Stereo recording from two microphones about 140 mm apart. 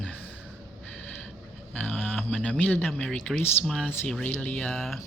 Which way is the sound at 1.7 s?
10° left (ahead or behind).